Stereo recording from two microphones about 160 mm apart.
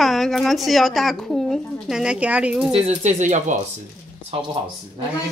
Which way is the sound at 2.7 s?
45° right (ahead or behind).